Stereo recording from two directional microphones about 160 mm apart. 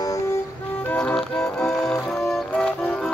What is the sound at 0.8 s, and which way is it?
Music, 5° left (ahead or behind).